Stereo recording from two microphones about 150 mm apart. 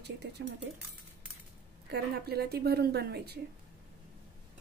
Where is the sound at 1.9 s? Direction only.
90° right.